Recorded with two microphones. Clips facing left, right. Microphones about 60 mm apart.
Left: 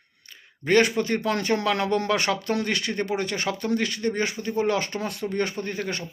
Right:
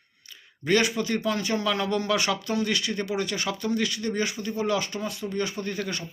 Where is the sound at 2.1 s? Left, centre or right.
Left.